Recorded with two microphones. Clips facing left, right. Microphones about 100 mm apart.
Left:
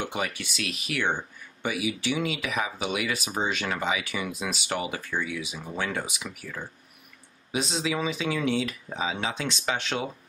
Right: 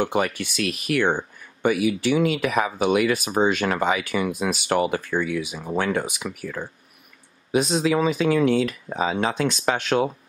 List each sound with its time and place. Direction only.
0.0 s speech: 50° right (ahead or behind)